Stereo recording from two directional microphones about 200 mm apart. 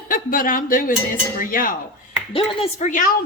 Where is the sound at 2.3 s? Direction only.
25° left (ahead or behind).